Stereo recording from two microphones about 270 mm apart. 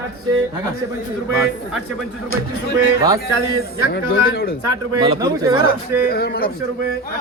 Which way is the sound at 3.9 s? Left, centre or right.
Left.